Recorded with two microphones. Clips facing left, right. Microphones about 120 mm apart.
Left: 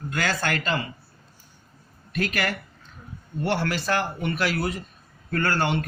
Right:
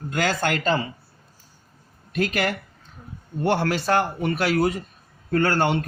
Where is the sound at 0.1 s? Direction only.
45° right (ahead or behind).